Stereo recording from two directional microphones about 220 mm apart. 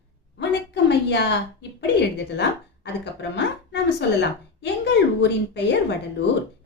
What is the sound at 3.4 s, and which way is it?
A woman's voice, 50° left (ahead or behind).